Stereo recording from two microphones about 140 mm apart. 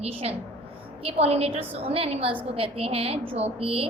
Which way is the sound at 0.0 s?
45° right (ahead or behind).